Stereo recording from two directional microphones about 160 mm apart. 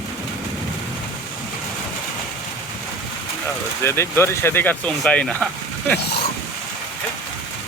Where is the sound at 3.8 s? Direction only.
15° left (ahead or behind).